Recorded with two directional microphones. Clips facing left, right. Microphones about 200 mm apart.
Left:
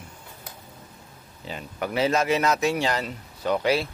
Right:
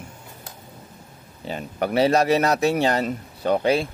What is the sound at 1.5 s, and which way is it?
Speech, 35° right (ahead or behind).